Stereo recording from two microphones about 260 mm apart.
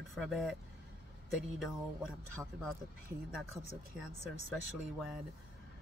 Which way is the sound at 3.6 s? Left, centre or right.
Left.